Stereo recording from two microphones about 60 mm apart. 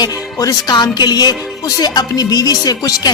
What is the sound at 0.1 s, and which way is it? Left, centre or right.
Speech, left.